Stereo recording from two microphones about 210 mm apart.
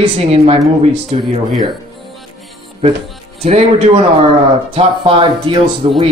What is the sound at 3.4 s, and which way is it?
A man's voice, 30° right (ahead or behind).